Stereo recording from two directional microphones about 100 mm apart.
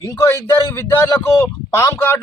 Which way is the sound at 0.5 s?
25° left (ahead or behind).